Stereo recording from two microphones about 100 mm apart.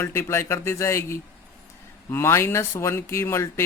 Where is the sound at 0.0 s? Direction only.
25° left (ahead or behind).